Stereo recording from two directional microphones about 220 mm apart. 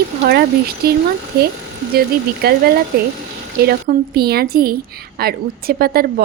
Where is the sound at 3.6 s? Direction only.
45° right (ahead or behind).